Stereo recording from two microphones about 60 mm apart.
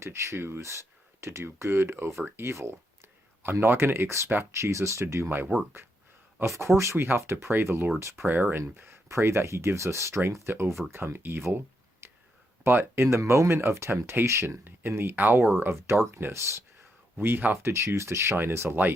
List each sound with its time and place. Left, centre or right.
0.0 s speech: right
5.5 s speech: right
6.4 s speech: right
6.9 s speech: right
7.5 s speech: right
7.9 s speech: right
8.3 s speech: right
9.0 s speech: right
11.5 s a sound: right
12.6 s speech: right
13.1 s speech: right